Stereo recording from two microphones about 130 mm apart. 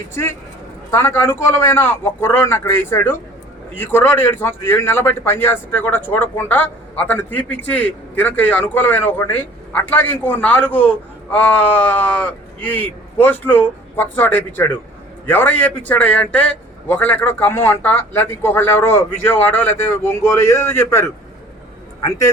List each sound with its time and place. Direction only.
0.1 s a man's voice: 20° left (ahead or behind)